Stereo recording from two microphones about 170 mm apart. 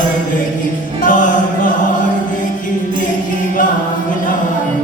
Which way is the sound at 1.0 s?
50° left (ahead or behind).